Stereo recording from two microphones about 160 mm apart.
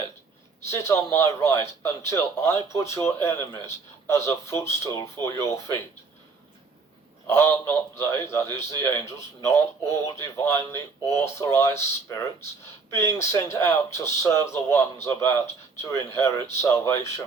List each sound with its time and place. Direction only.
0.7 s a man's voice: 15° left (ahead or behind)
7.3 s a man's voice: 15° left (ahead or behind)